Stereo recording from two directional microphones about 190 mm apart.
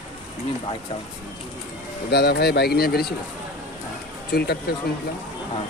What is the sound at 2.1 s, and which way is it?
Speech, 60° left (ahead or behind).